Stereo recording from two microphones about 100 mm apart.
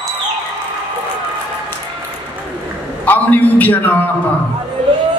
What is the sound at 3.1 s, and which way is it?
Speech, 15° left (ahead or behind).